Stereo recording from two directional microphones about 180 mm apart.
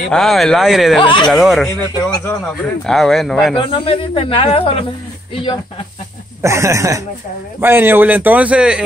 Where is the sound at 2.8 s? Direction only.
Centre (ahead or behind).